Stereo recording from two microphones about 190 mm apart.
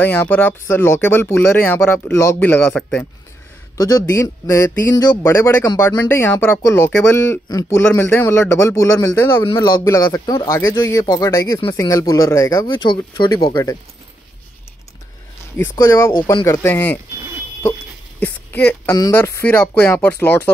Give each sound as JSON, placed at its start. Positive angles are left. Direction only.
{"t": 0.0, "sound": "speech", "side_deg": 10}
{"t": 15.8, "sound": "speech", "side_deg": 15}
{"t": 18.2, "sound": "speech", "side_deg": 10}